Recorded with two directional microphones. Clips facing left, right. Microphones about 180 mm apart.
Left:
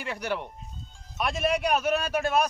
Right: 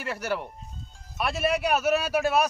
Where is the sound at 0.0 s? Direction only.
5° right (ahead or behind).